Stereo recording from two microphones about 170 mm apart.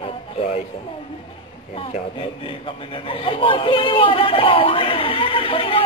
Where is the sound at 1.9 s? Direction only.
30° left (ahead or behind).